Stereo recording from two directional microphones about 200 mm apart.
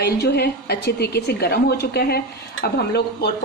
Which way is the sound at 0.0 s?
55° left (ahead or behind).